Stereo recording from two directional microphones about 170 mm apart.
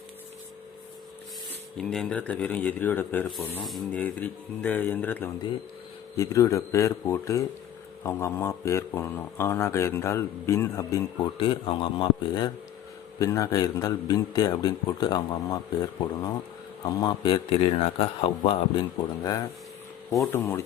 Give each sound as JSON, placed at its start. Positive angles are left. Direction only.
{"t": 1.8, "sound": "a man's voice", "side_deg": 5}
{"t": 19.2, "sound": "a man's voice", "side_deg": 20}